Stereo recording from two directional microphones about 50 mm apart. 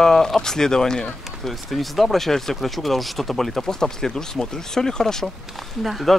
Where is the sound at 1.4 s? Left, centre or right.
Centre.